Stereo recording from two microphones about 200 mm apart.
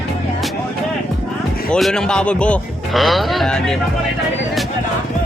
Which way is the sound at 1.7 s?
5° left (ahead or behind).